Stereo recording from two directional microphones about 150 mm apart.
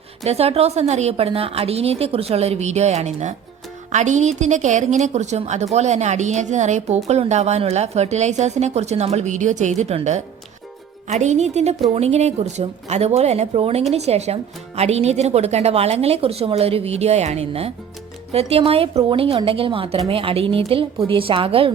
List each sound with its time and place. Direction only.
0.3 s a woman's voice: 45° right (ahead or behind)